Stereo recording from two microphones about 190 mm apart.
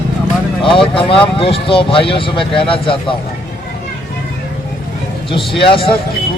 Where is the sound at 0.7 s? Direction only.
25° left (ahead or behind).